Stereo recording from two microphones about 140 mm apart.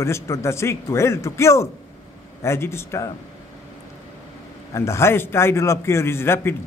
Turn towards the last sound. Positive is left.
turn(degrees=15)  # may be behind; listen again after turning